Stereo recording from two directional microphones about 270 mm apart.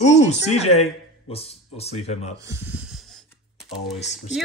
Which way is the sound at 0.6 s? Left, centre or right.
Left.